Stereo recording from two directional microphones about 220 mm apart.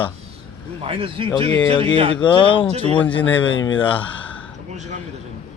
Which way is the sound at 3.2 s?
10° left (ahead or behind).